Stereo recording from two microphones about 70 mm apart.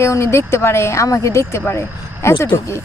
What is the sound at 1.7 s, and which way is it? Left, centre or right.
Speech, left.